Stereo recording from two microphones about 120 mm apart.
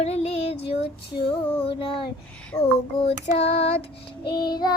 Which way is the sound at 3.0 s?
55° left (ahead or behind).